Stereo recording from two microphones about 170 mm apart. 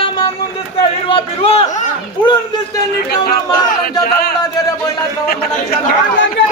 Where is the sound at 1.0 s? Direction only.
35° left (ahead or behind).